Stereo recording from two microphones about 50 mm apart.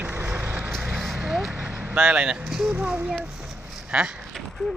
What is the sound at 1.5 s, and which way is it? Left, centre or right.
Vehicle, right.